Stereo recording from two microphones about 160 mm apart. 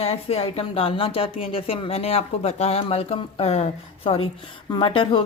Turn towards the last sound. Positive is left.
turn(degrees=30)  # may be behind; listen again after turning